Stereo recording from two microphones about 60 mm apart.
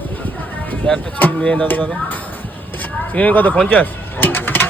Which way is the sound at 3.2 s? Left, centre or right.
Left.